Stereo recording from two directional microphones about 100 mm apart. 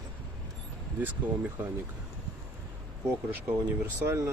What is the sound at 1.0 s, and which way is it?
Speech, 20° right (ahead or behind).